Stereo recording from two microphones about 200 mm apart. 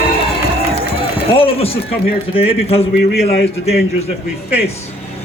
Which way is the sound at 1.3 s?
30° left (ahead or behind).